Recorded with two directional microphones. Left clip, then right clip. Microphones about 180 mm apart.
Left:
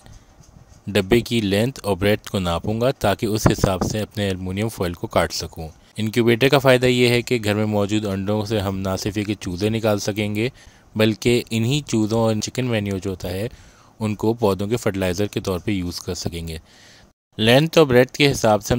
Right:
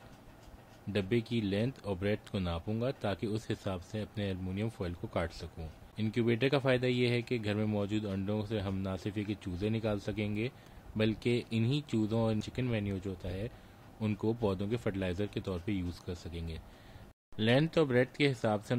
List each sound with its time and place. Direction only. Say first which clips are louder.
0.9 s speech: left 15 dB; 55° left (ahead or behind)